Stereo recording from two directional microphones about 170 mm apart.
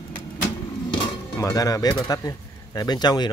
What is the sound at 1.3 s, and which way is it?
Speech, 20° left (ahead or behind).